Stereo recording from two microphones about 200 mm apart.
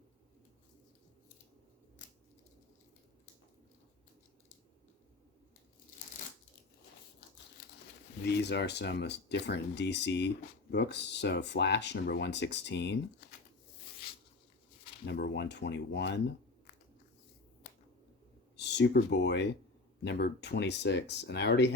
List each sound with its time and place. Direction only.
8.2 s speech: 55° left (ahead or behind)
15.0 s speech: 60° left (ahead or behind)
18.5 s speech: 60° left (ahead or behind)